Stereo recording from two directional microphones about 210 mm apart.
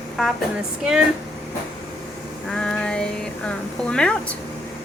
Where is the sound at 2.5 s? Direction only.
5° left (ahead or behind).